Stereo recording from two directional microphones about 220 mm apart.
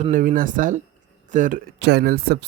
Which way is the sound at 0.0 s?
35° right (ahead or behind).